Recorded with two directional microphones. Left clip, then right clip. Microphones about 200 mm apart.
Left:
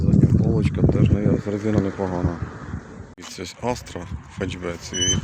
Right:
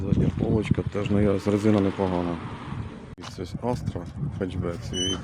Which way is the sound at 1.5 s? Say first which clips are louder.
Right 1 dB; 15° right (ahead or behind).